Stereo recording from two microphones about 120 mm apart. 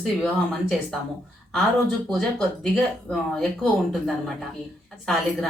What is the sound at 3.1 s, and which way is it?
Speech, centre (ahead or behind).